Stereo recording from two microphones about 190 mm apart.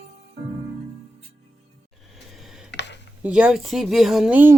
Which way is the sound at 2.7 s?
65° left (ahead or behind).